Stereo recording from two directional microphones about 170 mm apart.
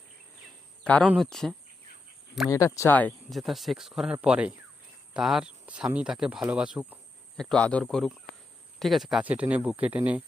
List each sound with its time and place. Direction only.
1.0 s speech: 5° right (ahead or behind)
2.5 s speech: 20° left (ahead or behind); by 10.2 s 10° right (ahead or behind)